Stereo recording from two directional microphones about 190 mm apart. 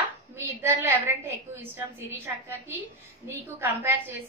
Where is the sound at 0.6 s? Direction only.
10° right (ahead or behind).